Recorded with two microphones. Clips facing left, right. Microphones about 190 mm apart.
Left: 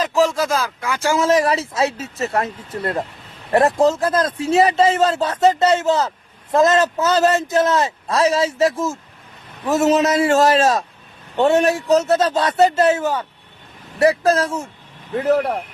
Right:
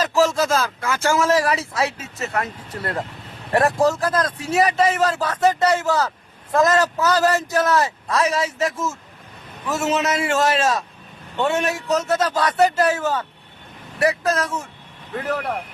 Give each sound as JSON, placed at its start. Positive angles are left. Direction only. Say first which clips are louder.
{"t": 0.0, "sound": "a man's voice", "louder": "left 1 dB", "side_deg": 15}
{"t": 14.0, "sound": "a man's voice", "louder": "left 5 dB", "side_deg": 30}